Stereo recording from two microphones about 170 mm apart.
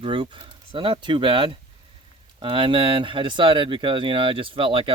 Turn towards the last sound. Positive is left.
turn(degrees=-30)  # may be behind; listen again after turning